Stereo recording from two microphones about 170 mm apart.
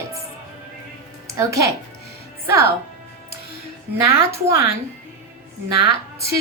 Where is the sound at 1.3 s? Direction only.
15° right (ahead or behind).